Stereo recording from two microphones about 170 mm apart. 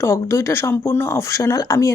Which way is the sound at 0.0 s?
15° left (ahead or behind).